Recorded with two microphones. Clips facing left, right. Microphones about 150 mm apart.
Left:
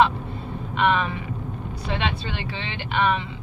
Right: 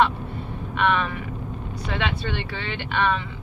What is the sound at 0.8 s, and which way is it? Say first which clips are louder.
Speech: left 1 dB; 20° left (ahead or behind).